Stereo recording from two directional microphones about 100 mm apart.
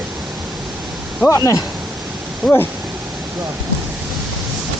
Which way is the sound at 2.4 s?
5° left (ahead or behind).